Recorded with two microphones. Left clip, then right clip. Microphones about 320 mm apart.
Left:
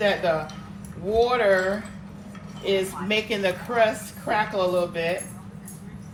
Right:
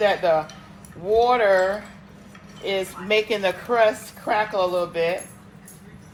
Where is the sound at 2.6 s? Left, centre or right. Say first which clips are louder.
Left 1 dB; centre.